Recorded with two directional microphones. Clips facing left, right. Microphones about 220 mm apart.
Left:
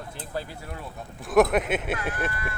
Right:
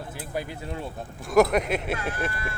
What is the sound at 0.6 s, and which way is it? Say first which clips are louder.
Speech: right 5 dB; 30° right (ahead or behind).